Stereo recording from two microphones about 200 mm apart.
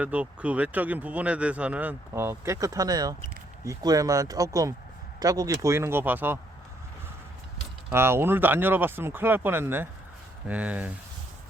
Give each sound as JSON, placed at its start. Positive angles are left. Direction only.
{"t": 0.0, "sound": "speech", "side_deg": -5}
{"t": 7.9, "sound": "speech", "side_deg": -10}